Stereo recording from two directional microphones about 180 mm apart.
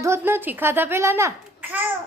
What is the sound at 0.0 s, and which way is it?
A child's voice, 15° right (ahead or behind).